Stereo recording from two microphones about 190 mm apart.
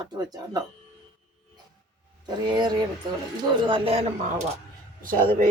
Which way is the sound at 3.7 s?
30° right (ahead or behind).